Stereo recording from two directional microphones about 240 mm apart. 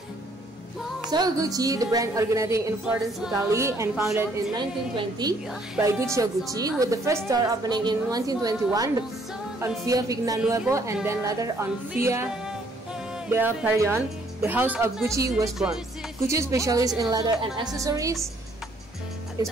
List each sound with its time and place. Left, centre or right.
1.1 s a woman's voice: centre
12.1 s music: centre
13.3 s a woman's voice: centre
19.4 s speech: centre